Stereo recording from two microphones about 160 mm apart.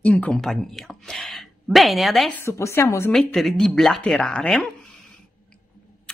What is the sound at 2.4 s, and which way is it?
Speech, 15° left (ahead or behind).